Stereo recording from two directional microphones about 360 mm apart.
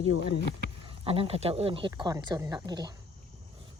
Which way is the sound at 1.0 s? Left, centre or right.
Centre.